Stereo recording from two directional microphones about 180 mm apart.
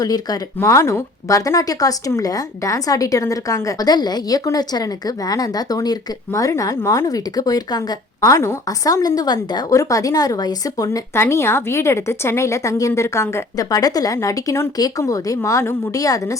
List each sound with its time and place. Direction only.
0.0 s speech: 20° left (ahead or behind)